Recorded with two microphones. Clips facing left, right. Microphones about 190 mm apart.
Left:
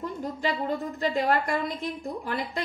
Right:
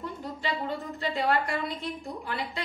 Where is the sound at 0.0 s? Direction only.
45° left (ahead or behind).